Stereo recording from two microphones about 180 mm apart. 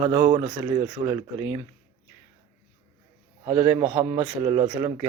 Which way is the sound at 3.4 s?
35° right (ahead or behind).